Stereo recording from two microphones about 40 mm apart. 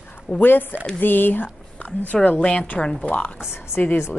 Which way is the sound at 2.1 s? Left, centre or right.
Left.